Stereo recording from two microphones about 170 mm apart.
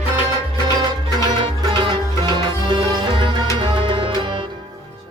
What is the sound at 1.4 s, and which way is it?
Music, 30° right (ahead or behind).